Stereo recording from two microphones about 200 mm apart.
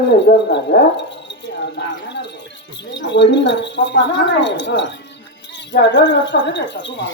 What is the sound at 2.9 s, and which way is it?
Speech, 65° left (ahead or behind).